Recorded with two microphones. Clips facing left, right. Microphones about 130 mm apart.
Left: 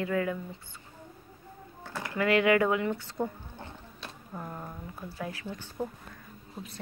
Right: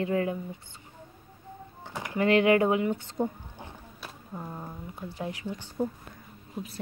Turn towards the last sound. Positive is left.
turn(degrees=-5)  # may be behind; listen again after turning